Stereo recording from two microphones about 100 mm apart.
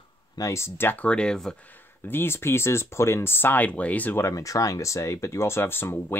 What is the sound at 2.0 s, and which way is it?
Speech, 25° left (ahead or behind).